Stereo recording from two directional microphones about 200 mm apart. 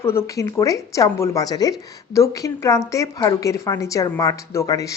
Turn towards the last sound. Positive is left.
turn(degrees=15)  # may be behind; listen again after turning